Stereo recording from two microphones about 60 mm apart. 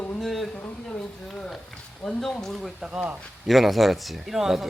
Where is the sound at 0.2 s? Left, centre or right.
Centre.